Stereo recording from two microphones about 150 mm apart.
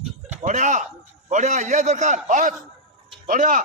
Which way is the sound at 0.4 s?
55° right (ahead or behind).